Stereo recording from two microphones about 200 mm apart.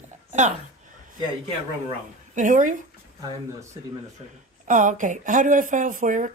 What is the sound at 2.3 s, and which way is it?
Speech, 40° right (ahead or behind).